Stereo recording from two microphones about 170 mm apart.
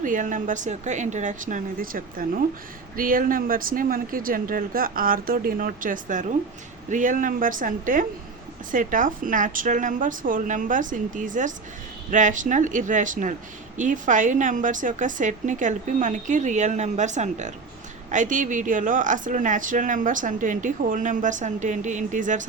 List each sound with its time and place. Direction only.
0.0 s speech: 50° right (ahead or behind)